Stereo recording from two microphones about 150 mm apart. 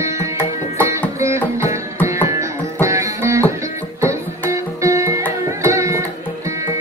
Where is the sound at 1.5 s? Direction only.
20° right (ahead or behind).